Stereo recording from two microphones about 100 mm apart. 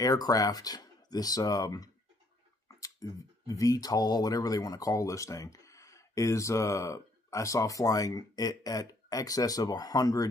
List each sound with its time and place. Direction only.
0.0 s speech: 35° left (ahead or behind)